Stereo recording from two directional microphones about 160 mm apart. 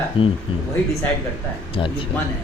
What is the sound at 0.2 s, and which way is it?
Speech, 35° left (ahead or behind).